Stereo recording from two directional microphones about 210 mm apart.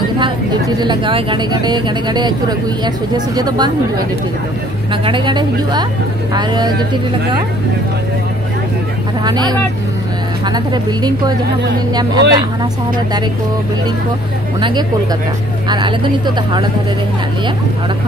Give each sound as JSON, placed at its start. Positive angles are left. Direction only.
{"t": 0.2, "sound": "a woman's voice", "side_deg": -20}
{"t": 3.3, "sound": "a woman's voice", "side_deg": -20}
{"t": 5.0, "sound": "a woman's voice", "side_deg": -20}
{"t": 9.2, "sound": "a woman's voice", "side_deg": -20}
{"t": 15.7, "sound": "a woman's voice", "side_deg": -20}